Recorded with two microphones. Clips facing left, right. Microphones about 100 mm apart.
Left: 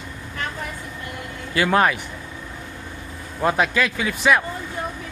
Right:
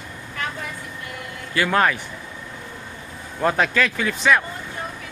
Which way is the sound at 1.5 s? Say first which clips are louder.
Left 1 dB; 20° left (ahead or behind).